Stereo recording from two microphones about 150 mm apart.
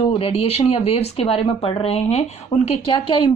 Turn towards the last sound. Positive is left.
turn(degrees=30)  # may be behind; listen again after turning